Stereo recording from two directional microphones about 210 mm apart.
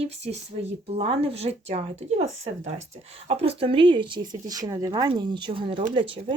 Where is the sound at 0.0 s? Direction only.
30° right (ahead or behind).